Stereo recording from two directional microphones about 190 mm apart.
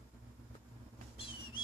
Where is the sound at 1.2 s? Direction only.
30° left (ahead or behind).